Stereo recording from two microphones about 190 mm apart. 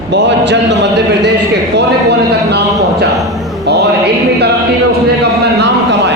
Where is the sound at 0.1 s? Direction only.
65° right (ahead or behind).